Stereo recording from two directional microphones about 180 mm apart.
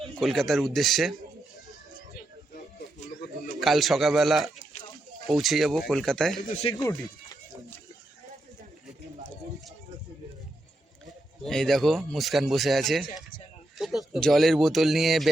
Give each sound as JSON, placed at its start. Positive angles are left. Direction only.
{"t": 0.2, "sound": "speech", "side_deg": 0}
{"t": 3.2, "sound": "bird", "side_deg": 50}
{"t": 3.6, "sound": "speech", "side_deg": 0}
{"t": 6.6, "sound": "speech", "side_deg": 30}
{"t": 11.0, "sound": "speech", "side_deg": 0}